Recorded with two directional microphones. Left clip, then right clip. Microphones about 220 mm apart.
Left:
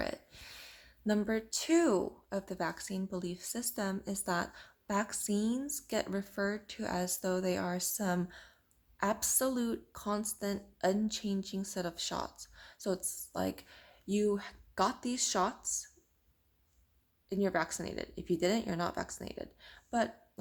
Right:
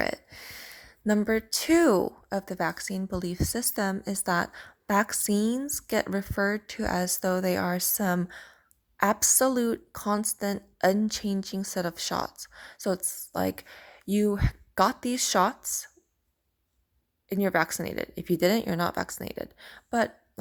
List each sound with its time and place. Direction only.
0.0 s speech: 35° right (ahead or behind)
17.2 s speech: 35° right (ahead or behind)